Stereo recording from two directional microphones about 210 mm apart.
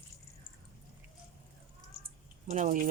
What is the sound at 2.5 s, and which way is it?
Speech, 35° right (ahead or behind).